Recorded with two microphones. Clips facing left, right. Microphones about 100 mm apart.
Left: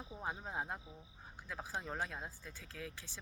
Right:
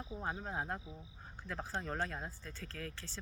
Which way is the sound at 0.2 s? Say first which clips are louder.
Right 1 dB; 10° left (ahead or behind).